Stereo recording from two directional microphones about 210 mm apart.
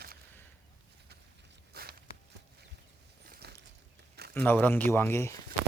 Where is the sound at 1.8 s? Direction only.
45° right (ahead or behind).